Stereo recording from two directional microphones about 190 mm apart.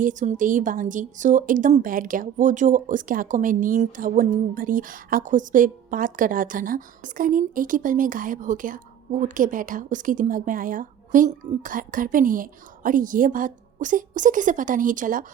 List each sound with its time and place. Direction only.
0.0 s a woman's voice: 40° right (ahead or behind)